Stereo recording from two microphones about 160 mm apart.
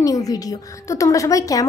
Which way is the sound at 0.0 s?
20° left (ahead or behind).